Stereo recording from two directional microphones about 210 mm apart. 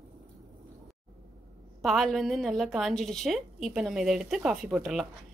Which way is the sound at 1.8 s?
Centre (ahead or behind).